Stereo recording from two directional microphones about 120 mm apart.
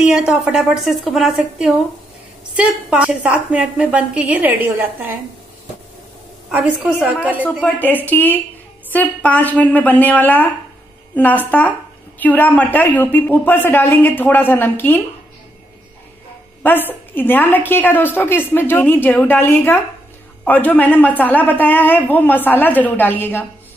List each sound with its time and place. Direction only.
0.0 s a woman's voice: 5° right (ahead or behind)
6.5 s a woman's voice: 10° right (ahead or behind)
7.6 s a woman's voice: 15° left (ahead or behind)
16.6 s a woman's voice: 15° left (ahead or behind)